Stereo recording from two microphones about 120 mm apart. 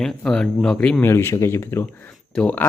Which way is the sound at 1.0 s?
20° left (ahead or behind).